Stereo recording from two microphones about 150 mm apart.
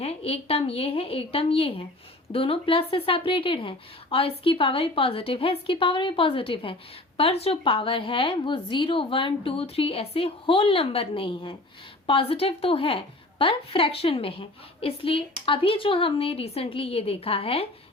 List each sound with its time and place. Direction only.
0.0 s a woman's voice: 40° left (ahead or behind)